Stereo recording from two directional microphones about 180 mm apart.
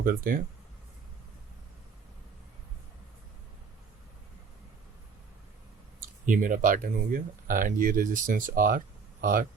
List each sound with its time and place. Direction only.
0.0 s speech: 50° right (ahead or behind)
6.2 s speech: 50° right (ahead or behind)